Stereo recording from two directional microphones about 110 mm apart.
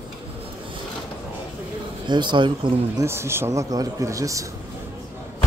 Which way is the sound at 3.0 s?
25° right (ahead or behind).